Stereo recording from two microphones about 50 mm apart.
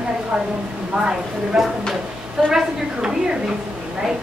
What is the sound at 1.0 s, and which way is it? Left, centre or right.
A woman's voice, centre.